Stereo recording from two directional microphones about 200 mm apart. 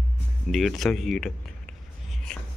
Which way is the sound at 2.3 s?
5° left (ahead or behind).